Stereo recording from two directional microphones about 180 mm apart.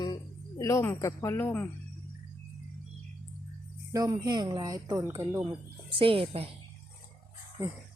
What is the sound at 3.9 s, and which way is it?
Speech, 20° right (ahead or behind).